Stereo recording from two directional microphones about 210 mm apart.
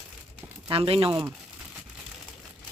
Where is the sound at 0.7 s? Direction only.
25° right (ahead or behind).